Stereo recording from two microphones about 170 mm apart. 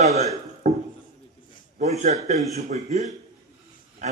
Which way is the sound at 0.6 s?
45° right (ahead or behind).